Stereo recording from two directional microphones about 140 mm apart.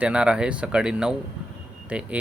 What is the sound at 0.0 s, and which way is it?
Speech, 5° right (ahead or behind).